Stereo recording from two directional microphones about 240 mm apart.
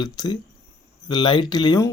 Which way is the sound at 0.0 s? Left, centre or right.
Centre.